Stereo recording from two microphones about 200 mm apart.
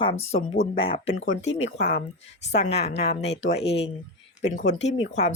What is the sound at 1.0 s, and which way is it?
Speech, 80° left.